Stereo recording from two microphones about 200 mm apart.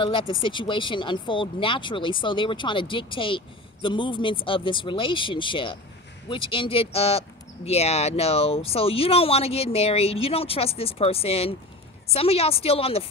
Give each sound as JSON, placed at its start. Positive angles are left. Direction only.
{"t": 0.0, "sound": "speech", "side_deg": 25}